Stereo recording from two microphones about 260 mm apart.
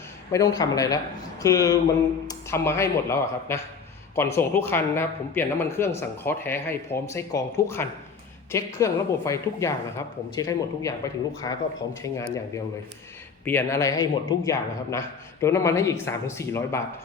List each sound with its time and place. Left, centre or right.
0.3 s speech: centre
13.4 s speech: centre